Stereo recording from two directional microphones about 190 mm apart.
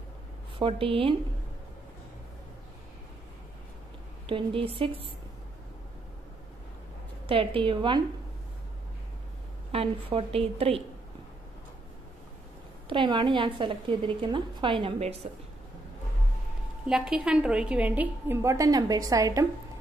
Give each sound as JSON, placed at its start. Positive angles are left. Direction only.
{"t": 0.6, "sound": "a woman's voice", "side_deg": -30}
{"t": 4.3, "sound": "a woman's voice", "side_deg": -25}
{"t": 7.2, "sound": "a woman's voice", "side_deg": -30}
{"t": 9.7, "sound": "a woman's voice", "side_deg": -30}
{"t": 12.8, "sound": "a woman's voice", "side_deg": -25}
{"t": 16.8, "sound": "a woman's voice", "side_deg": -5}